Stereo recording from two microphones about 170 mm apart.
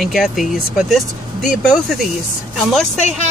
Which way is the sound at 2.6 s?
Centre (ahead or behind).